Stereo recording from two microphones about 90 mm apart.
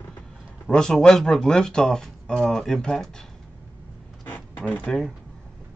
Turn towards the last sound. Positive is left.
turn(degrees=5)  # may be behind; listen again after turning